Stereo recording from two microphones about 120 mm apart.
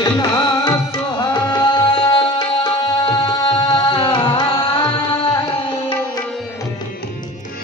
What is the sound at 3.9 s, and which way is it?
Music, 45° left (ahead or behind).